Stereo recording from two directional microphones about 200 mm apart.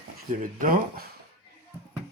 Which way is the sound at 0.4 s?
45° right (ahead or behind).